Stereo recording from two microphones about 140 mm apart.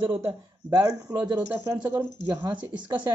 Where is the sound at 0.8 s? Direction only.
25° right (ahead or behind).